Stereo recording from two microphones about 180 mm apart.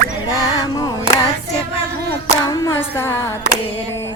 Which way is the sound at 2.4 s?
20° left (ahead or behind).